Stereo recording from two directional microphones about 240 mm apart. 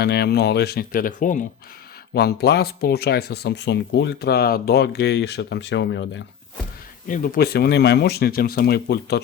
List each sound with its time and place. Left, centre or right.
0.0 s speech: left
7.1 s speech: left